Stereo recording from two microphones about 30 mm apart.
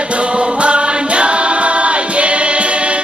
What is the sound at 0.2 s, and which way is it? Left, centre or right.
Choir, right.